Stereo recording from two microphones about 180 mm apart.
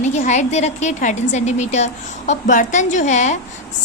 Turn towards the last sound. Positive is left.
turn(degrees=40)  # may be behind; listen again after turning